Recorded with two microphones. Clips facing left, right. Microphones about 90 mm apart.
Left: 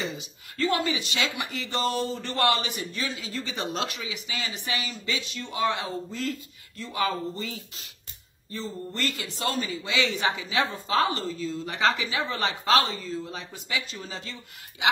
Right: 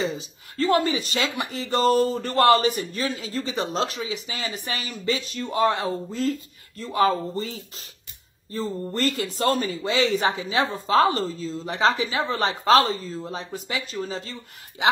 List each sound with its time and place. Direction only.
0.0 s speech: 35° right (ahead or behind)